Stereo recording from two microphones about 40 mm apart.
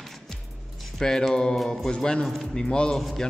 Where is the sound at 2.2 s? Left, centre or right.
Centre.